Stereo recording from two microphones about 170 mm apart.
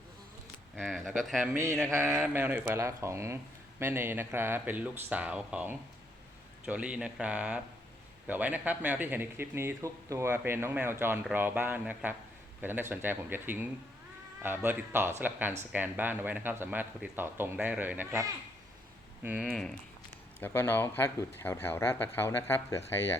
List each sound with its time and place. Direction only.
0.8 s speech: centre (ahead or behind)
1.5 s speech: 15° right (ahead or behind)
19.5 s speech: 5° left (ahead or behind)